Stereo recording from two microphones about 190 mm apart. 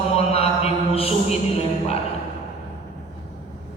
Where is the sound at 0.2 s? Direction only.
30° left (ahead or behind).